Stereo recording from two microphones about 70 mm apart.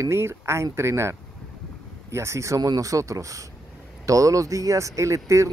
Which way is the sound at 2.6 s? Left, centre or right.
Right.